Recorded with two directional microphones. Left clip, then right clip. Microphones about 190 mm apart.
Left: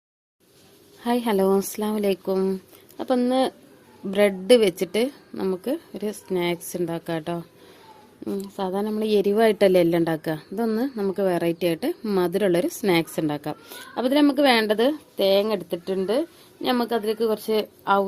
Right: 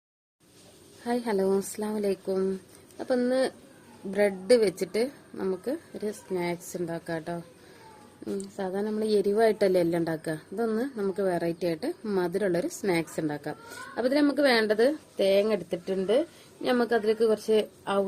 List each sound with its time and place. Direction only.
1.0 s a woman's voice: 45° left (ahead or behind)